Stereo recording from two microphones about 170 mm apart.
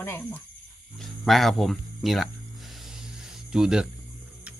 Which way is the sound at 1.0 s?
Centre (ahead or behind).